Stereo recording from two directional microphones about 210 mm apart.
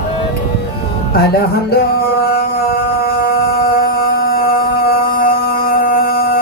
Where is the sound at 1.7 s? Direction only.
45° left (ahead or behind).